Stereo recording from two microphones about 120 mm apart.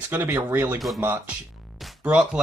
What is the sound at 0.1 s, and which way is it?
Speech, 15° right (ahead or behind).